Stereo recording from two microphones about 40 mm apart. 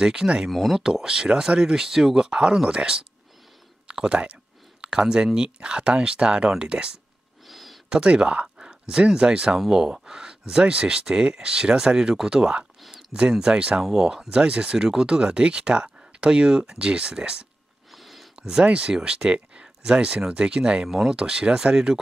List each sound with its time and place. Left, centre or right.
0.0 s speech: centre
0.5 s speech: centre
0.7 s speech: centre
7.4 s a sound: centre
7.9 s speech: right
9.7 s speech: centre
14.3 s speech: right
17.9 s a sound: centre
18.4 s speech: right